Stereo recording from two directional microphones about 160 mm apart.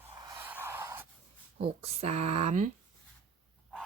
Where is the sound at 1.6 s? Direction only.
40° right (ahead or behind).